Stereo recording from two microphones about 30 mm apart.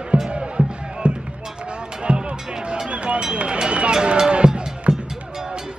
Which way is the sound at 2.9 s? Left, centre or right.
Right.